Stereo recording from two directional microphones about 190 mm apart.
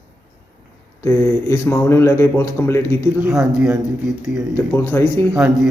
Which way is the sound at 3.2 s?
10° right (ahead or behind).